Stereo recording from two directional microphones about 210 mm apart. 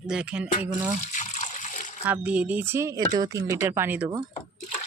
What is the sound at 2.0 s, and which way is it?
Speech, 5° right (ahead or behind).